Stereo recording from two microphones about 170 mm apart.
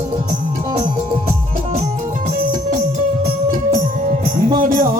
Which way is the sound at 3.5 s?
50° right (ahead or behind).